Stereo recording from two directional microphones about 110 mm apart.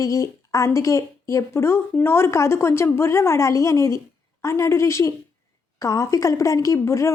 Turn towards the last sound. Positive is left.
turn(degrees=25)  # may be behind; listen again after turning